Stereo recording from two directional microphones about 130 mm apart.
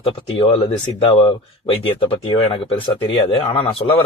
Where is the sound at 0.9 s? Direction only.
45° left (ahead or behind).